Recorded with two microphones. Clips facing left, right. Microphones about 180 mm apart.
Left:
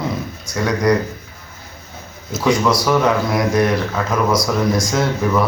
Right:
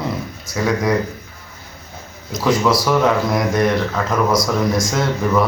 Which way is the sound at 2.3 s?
Centre (ahead or behind).